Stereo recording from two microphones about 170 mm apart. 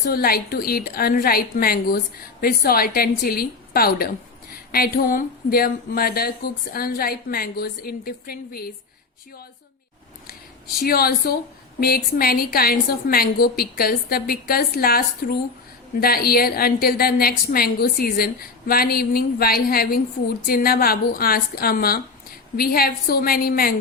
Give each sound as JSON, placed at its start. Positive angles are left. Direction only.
{"t": 0.1, "sound": "a woman's voice", "side_deg": 60}
{"t": 10.2, "sound": "a sound", "side_deg": 60}
{"t": 11.8, "sound": "a woman's voice", "side_deg": 65}